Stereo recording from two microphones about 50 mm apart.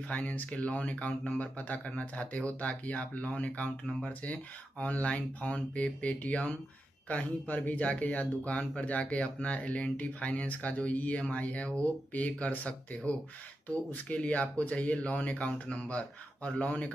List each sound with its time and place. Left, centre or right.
0.1 s speech: left